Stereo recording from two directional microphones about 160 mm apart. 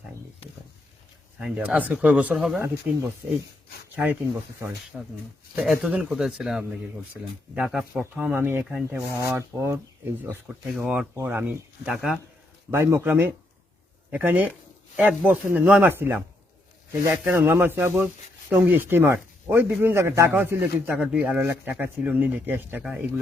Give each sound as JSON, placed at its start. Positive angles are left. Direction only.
{"t": 1.4, "sound": "a man's voice", "side_deg": -10}
{"t": 2.6, "sound": "a man's voice", "side_deg": -15}
{"t": 10.8, "sound": "a man's voice", "side_deg": -5}
{"t": 12.7, "sound": "a man's voice", "side_deg": -15}